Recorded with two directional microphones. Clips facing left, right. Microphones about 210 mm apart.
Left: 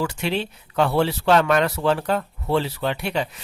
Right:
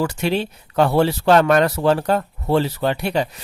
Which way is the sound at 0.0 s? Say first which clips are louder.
Right 4 dB; 45° right (ahead or behind).